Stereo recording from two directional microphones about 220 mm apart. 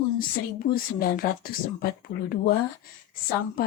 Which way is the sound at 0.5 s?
40° left (ahead or behind).